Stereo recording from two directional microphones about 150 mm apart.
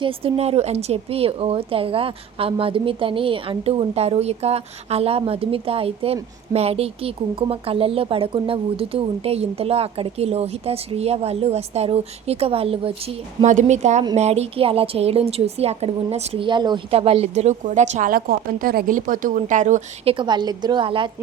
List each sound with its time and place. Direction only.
0.0 s a woman's voice: 40° right (ahead or behind)
13.4 s a woman's voice: 55° right (ahead or behind)
20.1 s a woman's voice: 30° right (ahead or behind)